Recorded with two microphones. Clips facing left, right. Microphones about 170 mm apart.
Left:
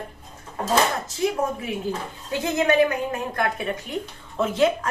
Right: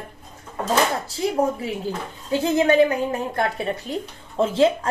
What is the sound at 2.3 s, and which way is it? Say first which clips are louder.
A woman's voice: right 3 dB; 30° right (ahead or behind).